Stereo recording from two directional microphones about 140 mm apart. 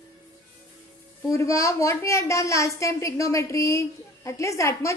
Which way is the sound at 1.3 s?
20° left (ahead or behind).